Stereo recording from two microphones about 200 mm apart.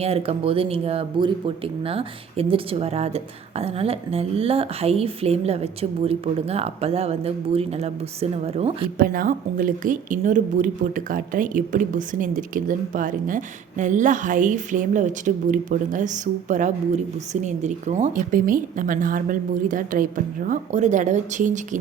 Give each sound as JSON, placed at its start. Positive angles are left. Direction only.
{"t": 0.0, "sound": "speech", "side_deg": -30}
{"t": 9.0, "sound": "speech", "side_deg": -45}